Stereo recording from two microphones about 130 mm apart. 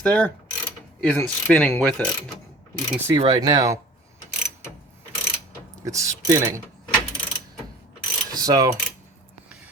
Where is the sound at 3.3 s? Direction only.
30° right (ahead or behind).